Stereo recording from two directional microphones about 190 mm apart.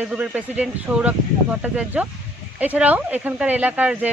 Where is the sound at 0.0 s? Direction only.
5° right (ahead or behind).